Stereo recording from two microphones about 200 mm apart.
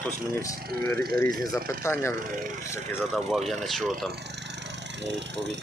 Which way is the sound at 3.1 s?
Centre (ahead or behind).